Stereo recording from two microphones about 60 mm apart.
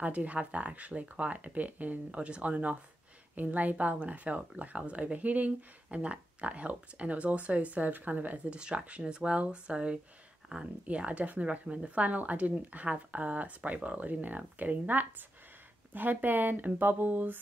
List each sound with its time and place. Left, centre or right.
0.0 s speech: right